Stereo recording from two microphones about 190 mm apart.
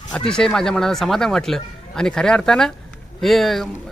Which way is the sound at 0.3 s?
5° left (ahead or behind).